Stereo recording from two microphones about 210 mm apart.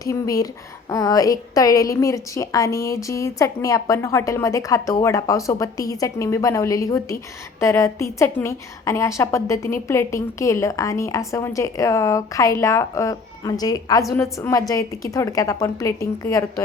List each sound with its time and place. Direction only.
0.0 s a woman's voice: 15° left (ahead or behind)